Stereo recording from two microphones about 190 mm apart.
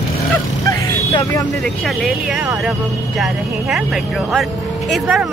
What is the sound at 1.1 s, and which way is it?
Speech, 25° left (ahead or behind).